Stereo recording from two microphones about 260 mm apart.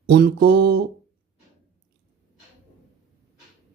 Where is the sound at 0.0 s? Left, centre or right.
Right.